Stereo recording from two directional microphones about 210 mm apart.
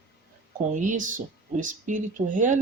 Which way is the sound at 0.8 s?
35° right (ahead or behind).